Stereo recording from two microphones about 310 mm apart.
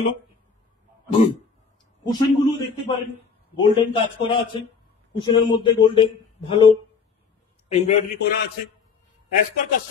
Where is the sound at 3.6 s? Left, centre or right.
Centre.